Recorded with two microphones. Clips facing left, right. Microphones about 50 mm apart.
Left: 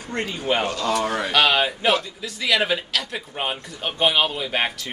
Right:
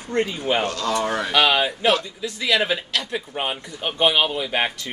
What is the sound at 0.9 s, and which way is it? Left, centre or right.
Speech, centre.